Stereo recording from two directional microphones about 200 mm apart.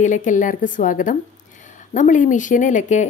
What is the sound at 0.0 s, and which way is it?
Speech, 40° left (ahead or behind).